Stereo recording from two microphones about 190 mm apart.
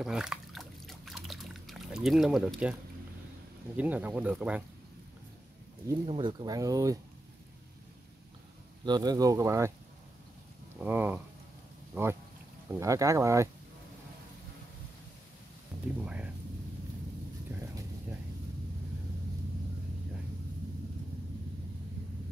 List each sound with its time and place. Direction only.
0.0 s trickle: 5° right (ahead or behind)
3.7 s speech: 10° right (ahead or behind)
6.0 s speech: 25° right (ahead or behind)
8.8 s speech: 20° right (ahead or behind)
10.8 s speech: 10° right (ahead or behind)
16.0 s rain: 5° right (ahead or behind)
17.5 s vehicle: 15° right (ahead or behind)